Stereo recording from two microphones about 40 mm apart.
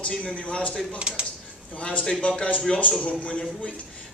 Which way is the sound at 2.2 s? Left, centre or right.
Left.